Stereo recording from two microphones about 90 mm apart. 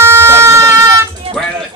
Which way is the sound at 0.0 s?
30° right (ahead or behind).